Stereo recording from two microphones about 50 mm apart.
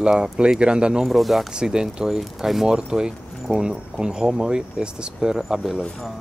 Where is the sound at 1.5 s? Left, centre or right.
Centre.